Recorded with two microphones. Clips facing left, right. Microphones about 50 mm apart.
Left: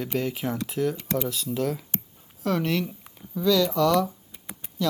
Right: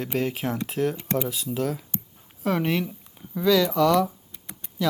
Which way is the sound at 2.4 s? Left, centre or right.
Centre.